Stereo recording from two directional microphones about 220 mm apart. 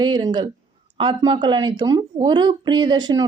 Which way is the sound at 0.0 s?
20° right (ahead or behind).